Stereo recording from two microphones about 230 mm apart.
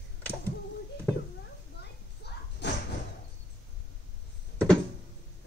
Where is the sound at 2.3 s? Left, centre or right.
Left.